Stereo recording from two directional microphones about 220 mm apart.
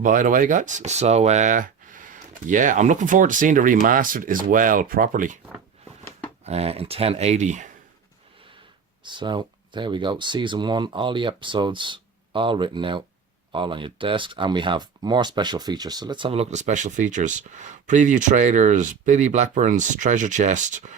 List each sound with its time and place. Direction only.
0.0 s speech: 35° right (ahead or behind)
6.4 s speech: 30° right (ahead or behind)
9.0 s speech: 20° right (ahead or behind)